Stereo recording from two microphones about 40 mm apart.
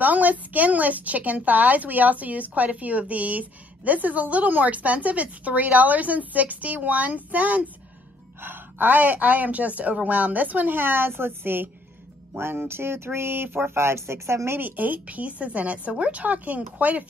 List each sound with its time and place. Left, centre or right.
0.0 s a woman's voice: right
8.4 s a woman's voice: right
12.6 s speech: right
14.6 s a woman's voice: right